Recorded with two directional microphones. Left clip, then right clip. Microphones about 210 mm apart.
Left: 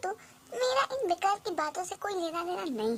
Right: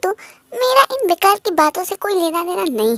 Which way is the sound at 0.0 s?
30° right (ahead or behind).